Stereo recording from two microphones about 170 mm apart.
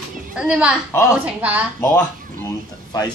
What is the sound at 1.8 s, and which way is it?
Speech, 15° left (ahead or behind).